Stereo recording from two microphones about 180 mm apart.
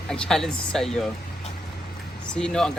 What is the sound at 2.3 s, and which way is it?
Speech, 5° left (ahead or behind).